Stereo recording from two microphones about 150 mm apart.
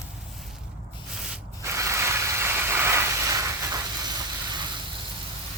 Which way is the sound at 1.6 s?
20° right (ahead or behind).